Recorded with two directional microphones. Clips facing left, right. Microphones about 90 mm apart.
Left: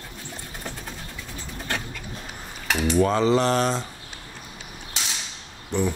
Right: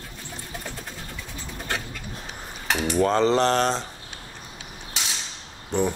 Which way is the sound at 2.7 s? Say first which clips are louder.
Left 1 dB; 30° right (ahead or behind).